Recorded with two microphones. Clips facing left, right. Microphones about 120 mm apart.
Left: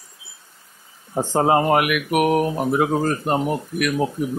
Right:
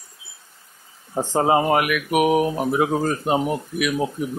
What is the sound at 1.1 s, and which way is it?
Speech, centre (ahead or behind).